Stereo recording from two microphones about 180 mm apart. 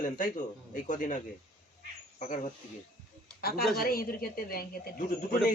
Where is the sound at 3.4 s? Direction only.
55° left (ahead or behind).